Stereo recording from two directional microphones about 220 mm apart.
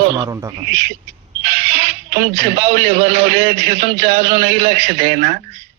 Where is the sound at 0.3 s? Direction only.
15° right (ahead or behind).